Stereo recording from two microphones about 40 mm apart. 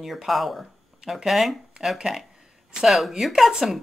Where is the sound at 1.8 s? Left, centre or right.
Right.